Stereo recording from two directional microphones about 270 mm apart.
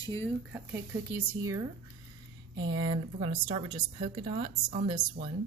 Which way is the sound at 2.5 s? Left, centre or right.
Centre.